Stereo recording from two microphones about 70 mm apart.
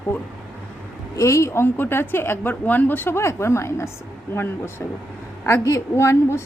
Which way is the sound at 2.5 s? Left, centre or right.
Left.